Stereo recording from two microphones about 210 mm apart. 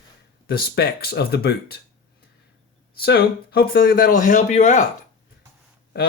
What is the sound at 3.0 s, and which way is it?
Speech, 45° left (ahead or behind).